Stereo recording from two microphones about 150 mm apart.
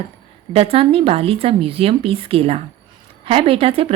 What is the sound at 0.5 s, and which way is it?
A woman's voice, 40° right (ahead or behind).